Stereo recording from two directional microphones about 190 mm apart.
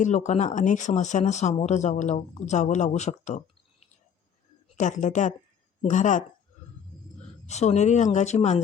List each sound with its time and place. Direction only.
0.0 s speech: 35° left (ahead or behind)
4.8 s speech: 40° left (ahead or behind)
7.4 s speech: 35° left (ahead or behind)